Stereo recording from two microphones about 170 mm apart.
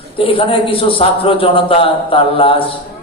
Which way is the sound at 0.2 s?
35° left (ahead or behind).